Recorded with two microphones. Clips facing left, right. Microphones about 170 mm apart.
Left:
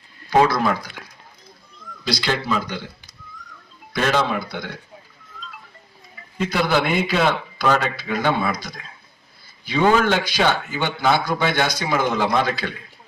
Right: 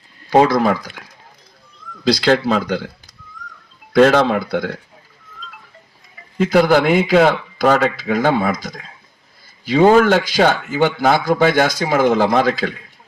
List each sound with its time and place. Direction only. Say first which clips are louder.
0.4 s a man's voice: right 5 dB; 45° right (ahead or behind)
1.8 s a sound: right 2 dB; 45° left (ahead or behind)
2.2 s speech: right 7 dB; 90° right
3.9 s speech: right 9 dB; 65° right (ahead or behind)
6.5 s a man's voice: right 8 dB; 45° right (ahead or behind)